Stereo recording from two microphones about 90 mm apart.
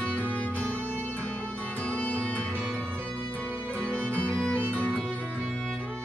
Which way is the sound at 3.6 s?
10° left (ahead or behind).